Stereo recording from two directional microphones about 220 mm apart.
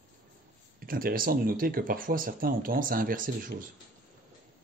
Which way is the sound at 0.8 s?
40° right (ahead or behind).